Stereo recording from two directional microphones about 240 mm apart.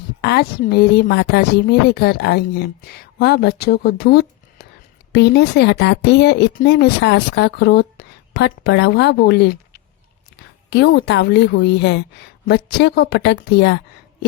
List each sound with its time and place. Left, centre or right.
0.2 s speech: left